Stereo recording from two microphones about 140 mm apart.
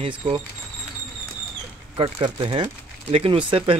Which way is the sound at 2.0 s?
40° right (ahead or behind).